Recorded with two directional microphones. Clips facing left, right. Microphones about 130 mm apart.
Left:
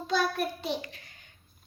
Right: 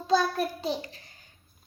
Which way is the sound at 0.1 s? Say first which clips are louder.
Right 4 dB; 35° right (ahead or behind).